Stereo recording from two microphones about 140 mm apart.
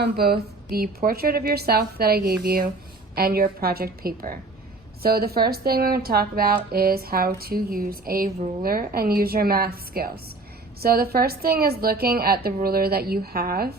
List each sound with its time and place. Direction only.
0.8 s speech: 90° right